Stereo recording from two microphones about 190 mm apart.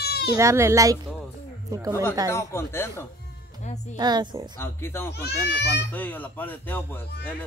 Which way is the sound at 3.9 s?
20° right (ahead or behind).